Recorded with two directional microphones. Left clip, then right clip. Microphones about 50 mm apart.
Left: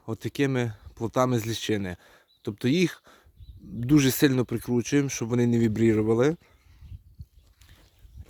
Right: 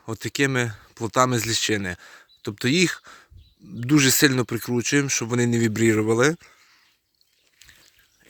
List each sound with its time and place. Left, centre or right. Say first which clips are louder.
0.0 s speech: right 4 dB; centre
2.5 s speech: right 4 dB; centre
4.4 s speech: right 2 dB; centre